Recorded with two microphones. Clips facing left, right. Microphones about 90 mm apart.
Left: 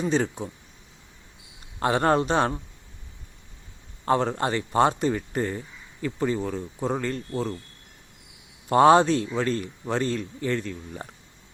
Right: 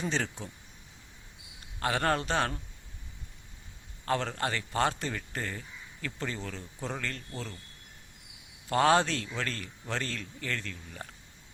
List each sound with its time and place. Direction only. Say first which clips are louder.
0.0 s speech: left 8 dB; 15° left (ahead or behind)
1.8 s speech: left 7 dB; 25° left (ahead or behind)
4.0 s speech: left 7 dB; 20° left (ahead or behind)
8.7 s speech: left 8 dB; 20° left (ahead or behind)